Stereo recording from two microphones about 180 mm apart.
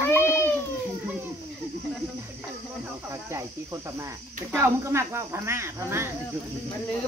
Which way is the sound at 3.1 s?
15° right (ahead or behind).